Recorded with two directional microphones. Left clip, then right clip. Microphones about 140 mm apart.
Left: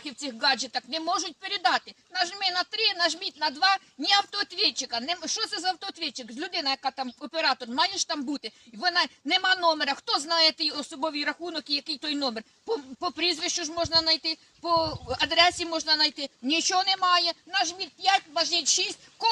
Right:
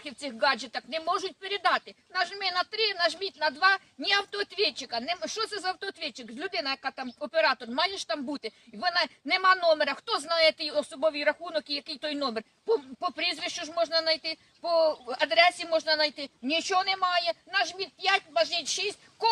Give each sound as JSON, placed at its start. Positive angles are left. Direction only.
{"t": 0.0, "sound": "a woman's voice", "side_deg": -15}